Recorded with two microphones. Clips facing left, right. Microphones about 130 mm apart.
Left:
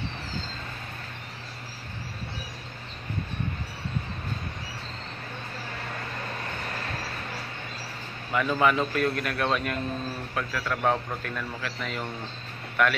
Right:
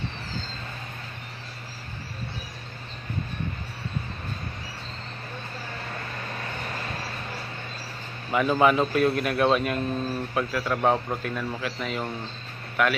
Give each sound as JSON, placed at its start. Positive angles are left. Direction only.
{"t": 8.3, "sound": "a man's voice", "side_deg": -20}